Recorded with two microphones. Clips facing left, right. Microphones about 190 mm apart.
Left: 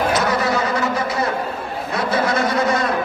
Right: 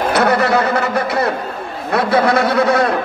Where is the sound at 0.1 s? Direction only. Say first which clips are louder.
Right 5 dB; 65° right (ahead or behind).